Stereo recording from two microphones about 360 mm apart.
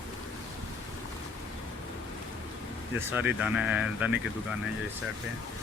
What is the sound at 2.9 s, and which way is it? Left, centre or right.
Speech, centre.